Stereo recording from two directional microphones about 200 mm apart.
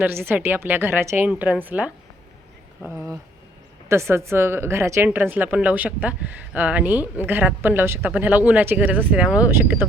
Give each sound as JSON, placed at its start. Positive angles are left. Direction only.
{"t": 0.0, "sound": "speech", "side_deg": -10}